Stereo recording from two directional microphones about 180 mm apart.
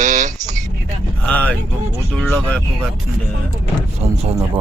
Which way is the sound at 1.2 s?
5° left (ahead or behind).